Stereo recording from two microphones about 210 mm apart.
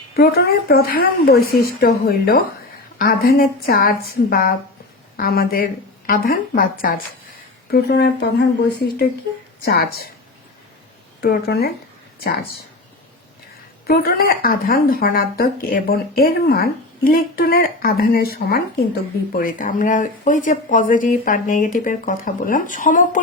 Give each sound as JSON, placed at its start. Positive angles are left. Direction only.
{"t": 0.2, "sound": "speech", "side_deg": 50}
{"t": 9.6, "sound": "speech", "side_deg": 45}
{"t": 11.2, "sound": "speech", "side_deg": 50}
{"t": 13.8, "sound": "speech", "side_deg": 45}